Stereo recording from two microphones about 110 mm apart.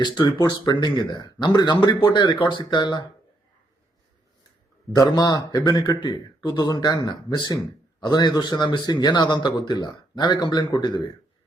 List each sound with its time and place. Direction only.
0.0 s speech: 40° left (ahead or behind)
4.9 s speech: 40° left (ahead or behind)